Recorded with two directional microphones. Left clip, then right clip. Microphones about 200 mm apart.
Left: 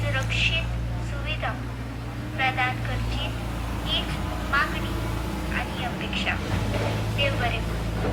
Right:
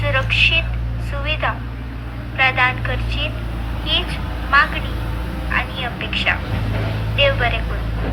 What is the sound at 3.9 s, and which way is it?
A woman's voice, 35° right (ahead or behind).